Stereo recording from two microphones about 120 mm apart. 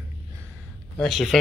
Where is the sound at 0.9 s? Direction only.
5° left (ahead or behind).